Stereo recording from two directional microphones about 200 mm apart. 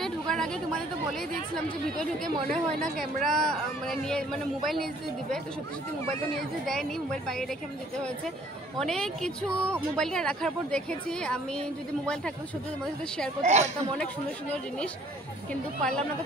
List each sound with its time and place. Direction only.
0.0 s speech: 5° left (ahead or behind)
6.6 s speech: centre (ahead or behind)
8.7 s speech: 5° left (ahead or behind)
13.4 s speech: 35° right (ahead or behind)